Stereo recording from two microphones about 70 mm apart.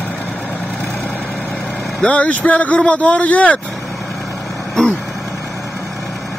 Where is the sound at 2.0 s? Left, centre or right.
Centre.